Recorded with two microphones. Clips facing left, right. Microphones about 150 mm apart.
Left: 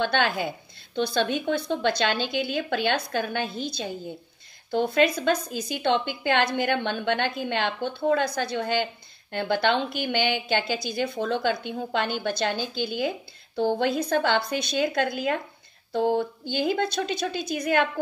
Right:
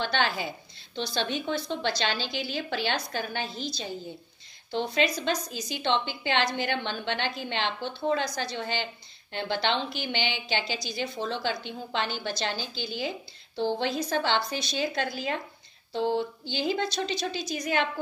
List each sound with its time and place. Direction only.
0.0 s a woman's voice: 55° left (ahead or behind)